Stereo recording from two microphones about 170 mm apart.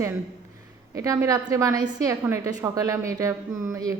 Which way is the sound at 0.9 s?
20° right (ahead or behind).